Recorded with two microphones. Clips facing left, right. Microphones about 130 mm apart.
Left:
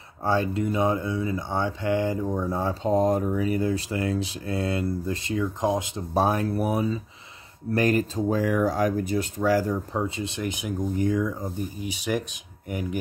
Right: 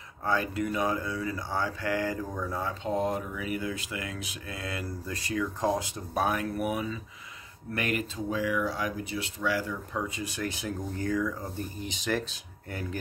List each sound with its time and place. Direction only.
0.2 s speech: 30° left (ahead or behind)
10.0 s speech: 25° left (ahead or behind)
11.8 s speech: 10° left (ahead or behind)